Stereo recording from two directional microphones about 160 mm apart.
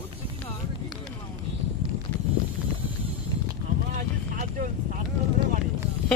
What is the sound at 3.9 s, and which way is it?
Vehicle, 55° right (ahead or behind).